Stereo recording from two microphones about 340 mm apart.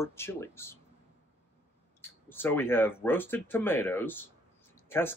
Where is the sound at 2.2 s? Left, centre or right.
Centre.